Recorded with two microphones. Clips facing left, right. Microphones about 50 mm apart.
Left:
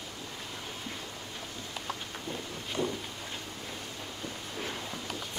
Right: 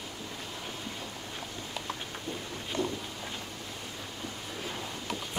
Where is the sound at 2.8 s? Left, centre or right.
Left.